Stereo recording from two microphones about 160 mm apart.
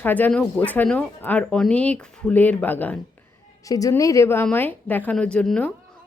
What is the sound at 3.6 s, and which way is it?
A woman's voice, 20° left (ahead or behind).